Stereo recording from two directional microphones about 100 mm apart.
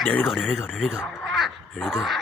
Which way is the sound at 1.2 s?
Centre (ahead or behind).